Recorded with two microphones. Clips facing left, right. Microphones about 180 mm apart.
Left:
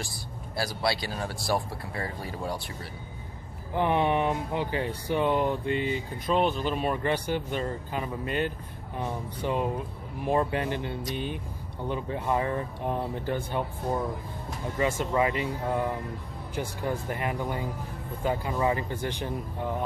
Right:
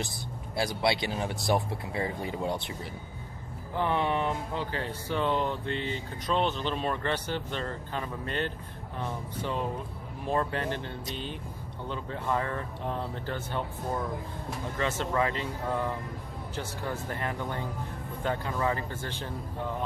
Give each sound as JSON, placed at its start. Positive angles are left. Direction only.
{"t": 0.6, "sound": "speech", "side_deg": -20}
{"t": 3.7, "sound": "speech", "side_deg": 15}